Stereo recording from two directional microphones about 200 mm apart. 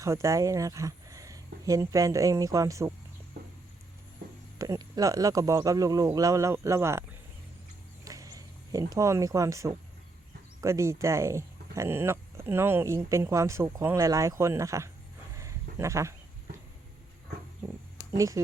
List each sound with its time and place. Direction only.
0.0 s speech: 15° right (ahead or behind)
4.5 s speech: 15° right (ahead or behind)
8.0 s a sound: 15° right (ahead or behind)
10.6 s speech: 15° right (ahead or behind)
15.4 s a sound: 15° right (ahead or behind)
18.2 s speech: 15° right (ahead or behind)